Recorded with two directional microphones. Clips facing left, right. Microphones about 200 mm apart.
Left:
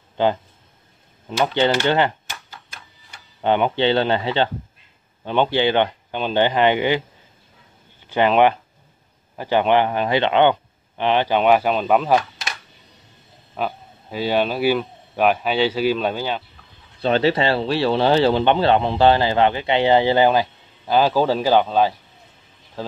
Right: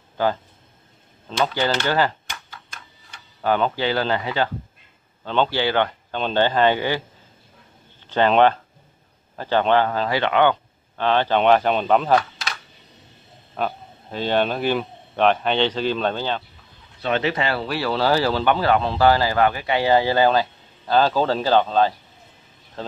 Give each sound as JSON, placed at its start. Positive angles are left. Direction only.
{"t": 1.4, "sound": "speech", "side_deg": 20}
{"t": 5.2, "sound": "speech", "side_deg": 15}
{"t": 8.1, "sound": "speech", "side_deg": 10}
{"t": 13.6, "sound": "speech", "side_deg": 5}
{"t": 17.0, "sound": "speech", "side_deg": 30}
{"t": 22.8, "sound": "a sound", "side_deg": 5}